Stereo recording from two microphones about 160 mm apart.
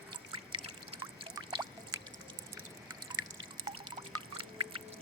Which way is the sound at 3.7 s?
35° right (ahead or behind).